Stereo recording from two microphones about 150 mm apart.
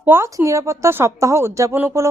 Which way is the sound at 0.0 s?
15° right (ahead or behind).